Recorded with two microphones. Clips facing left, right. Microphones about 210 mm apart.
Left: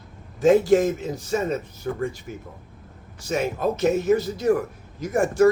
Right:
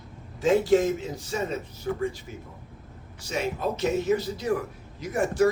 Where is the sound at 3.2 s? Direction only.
50° left (ahead or behind).